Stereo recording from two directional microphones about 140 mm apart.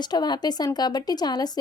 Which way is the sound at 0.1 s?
30° left (ahead or behind).